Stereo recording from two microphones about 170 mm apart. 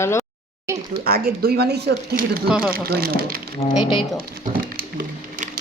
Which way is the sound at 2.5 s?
5° right (ahead or behind).